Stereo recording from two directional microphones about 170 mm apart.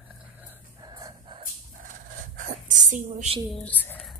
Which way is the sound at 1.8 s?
50° right (ahead or behind).